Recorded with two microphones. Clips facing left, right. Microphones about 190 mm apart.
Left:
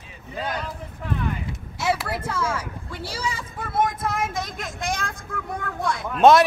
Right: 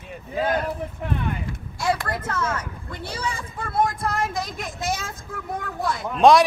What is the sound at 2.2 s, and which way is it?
Speech, 10° left (ahead or behind).